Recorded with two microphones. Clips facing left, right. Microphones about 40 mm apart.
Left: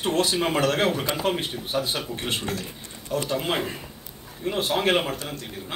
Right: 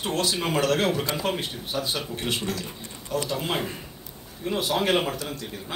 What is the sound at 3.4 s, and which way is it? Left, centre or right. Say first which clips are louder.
Speech: left 2 dB; left.